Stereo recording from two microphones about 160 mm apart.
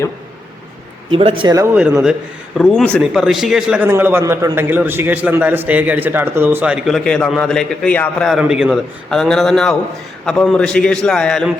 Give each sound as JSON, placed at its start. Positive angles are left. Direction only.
{"t": 1.1, "sound": "speech", "side_deg": -35}
{"t": 2.6, "sound": "a man's voice", "side_deg": 5}
{"t": 8.3, "sound": "a man's voice", "side_deg": -5}